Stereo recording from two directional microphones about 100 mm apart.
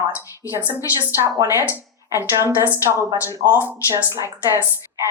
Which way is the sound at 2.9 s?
30° right (ahead or behind).